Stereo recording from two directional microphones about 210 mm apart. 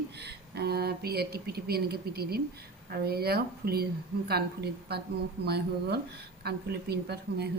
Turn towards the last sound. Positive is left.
turn(degrees=-50)  # may be behind; listen again after turning